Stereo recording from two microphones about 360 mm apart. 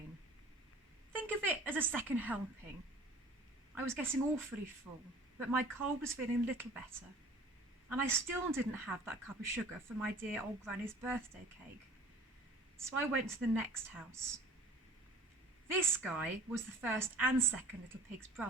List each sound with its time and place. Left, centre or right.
1.1 s a woman's voice: centre
3.8 s a woman's voice: centre
7.9 s a woman's voice: centre
12.7 s a woman's voice: centre
15.9 s a woman's voice: centre